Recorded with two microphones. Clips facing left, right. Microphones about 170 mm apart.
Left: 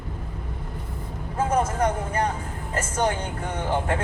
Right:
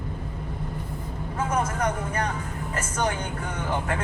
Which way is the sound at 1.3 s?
30° left (ahead or behind).